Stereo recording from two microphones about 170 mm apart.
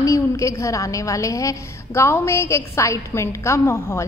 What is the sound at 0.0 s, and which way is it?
A woman's voice, 20° left (ahead or behind).